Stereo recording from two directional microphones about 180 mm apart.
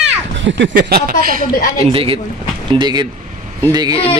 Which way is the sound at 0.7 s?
60° right (ahead or behind).